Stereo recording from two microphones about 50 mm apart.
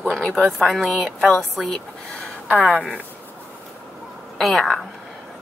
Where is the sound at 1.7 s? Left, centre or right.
Centre.